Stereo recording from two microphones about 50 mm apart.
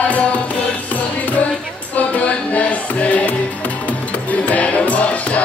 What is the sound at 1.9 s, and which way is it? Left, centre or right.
Music, left.